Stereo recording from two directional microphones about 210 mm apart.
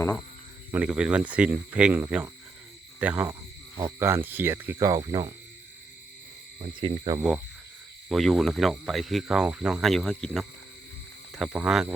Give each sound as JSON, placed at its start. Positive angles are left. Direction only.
{"t": 0.7, "sound": "speech", "side_deg": -5}
{"t": 6.7, "sound": "speech", "side_deg": -25}
{"t": 7.2, "sound": "speech", "side_deg": -10}
{"t": 8.1, "sound": "speech", "side_deg": 0}